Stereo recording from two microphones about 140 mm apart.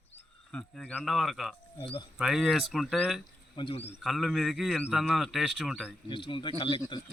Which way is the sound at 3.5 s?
40° left (ahead or behind).